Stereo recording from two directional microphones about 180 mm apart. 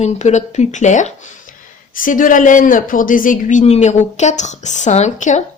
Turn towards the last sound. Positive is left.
turn(degrees=40)  # may be behind; listen again after turning